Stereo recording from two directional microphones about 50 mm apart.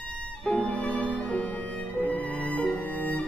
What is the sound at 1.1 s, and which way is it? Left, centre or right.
Music, left.